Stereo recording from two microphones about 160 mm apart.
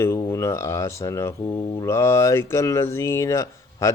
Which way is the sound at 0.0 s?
15° left (ahead or behind).